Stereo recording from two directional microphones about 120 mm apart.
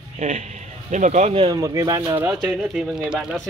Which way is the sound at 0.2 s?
70° right (ahead or behind).